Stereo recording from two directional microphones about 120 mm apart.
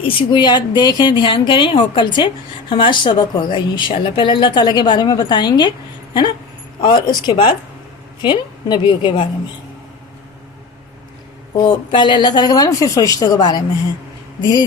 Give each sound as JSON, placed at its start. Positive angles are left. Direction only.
{"t": 0.0, "sound": "speech", "side_deg": 40}
{"t": 6.8, "sound": "speech", "side_deg": 40}
{"t": 11.5, "sound": "speech", "side_deg": 35}